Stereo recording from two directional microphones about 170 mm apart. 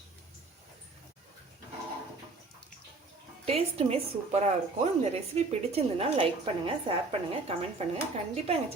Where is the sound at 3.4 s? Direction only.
35° right (ahead or behind).